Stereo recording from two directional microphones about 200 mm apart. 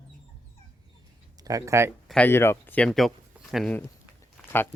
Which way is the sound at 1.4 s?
15° right (ahead or behind).